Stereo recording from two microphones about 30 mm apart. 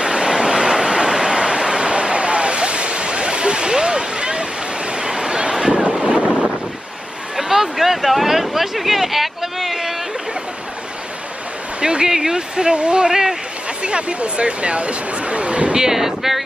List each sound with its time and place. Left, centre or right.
0.0 s vehicle: right
7.3 s a sound: centre
11.8 s speech: right
13.1 s speech: centre
13.8 s speech: right
15.7 s speech: centre